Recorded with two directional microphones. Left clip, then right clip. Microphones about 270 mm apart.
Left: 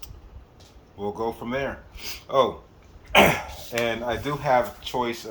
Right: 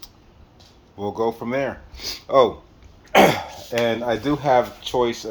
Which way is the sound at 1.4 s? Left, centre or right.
Right.